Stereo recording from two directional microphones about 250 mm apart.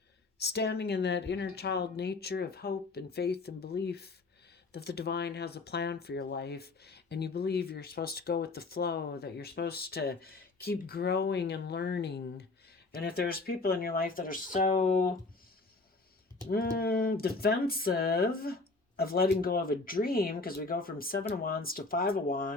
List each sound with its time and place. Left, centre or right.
0.4 s speech: left
16.5 s speech: left